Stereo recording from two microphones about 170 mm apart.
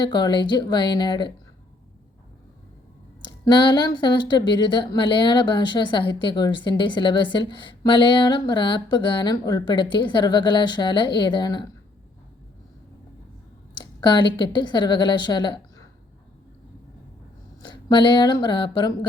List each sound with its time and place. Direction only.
0.0 s speech: 25° left (ahead or behind)
3.2 s speech: 25° left (ahead or behind)
13.7 s a sound: 25° left (ahead or behind)
14.3 s speech: 25° left (ahead or behind)
17.6 s speech: 25° left (ahead or behind)